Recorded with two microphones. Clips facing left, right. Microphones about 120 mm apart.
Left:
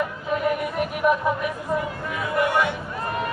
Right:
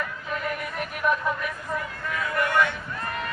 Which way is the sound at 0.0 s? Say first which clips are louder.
Left 7 dB; 15° left (ahead or behind).